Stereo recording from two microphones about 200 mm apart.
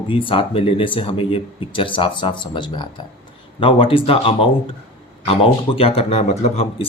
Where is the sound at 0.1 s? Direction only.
25° left (ahead or behind).